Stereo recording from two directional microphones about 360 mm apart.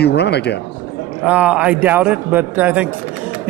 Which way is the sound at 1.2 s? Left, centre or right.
Centre.